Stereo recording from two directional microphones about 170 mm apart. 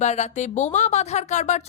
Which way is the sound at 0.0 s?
40° left (ahead or behind).